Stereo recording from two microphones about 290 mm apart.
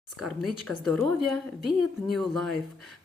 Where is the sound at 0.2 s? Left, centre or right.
Centre.